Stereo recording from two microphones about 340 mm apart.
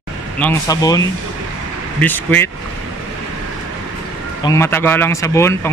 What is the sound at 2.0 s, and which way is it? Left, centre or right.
Speech, centre.